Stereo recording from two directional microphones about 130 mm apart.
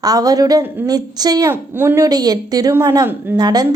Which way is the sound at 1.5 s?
15° right (ahead or behind).